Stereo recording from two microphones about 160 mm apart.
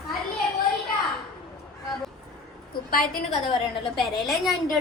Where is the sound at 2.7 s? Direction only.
70° left (ahead or behind).